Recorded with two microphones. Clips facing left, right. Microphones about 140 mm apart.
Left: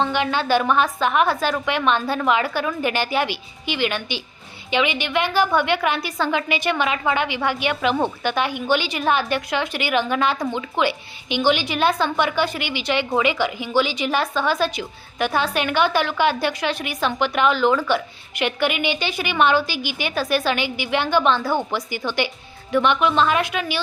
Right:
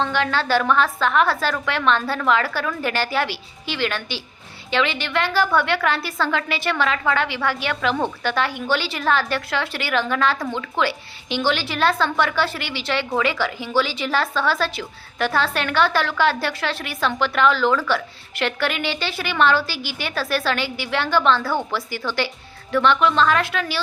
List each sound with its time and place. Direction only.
0.0 s a woman's voice: 15° left (ahead or behind)